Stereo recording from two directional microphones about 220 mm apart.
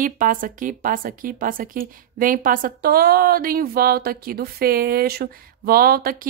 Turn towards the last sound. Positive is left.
turn(degrees=-40)  # may be behind; listen again after turning